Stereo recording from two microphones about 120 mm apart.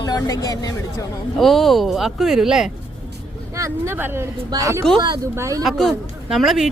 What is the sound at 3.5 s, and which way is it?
Speech, 25° right (ahead or behind).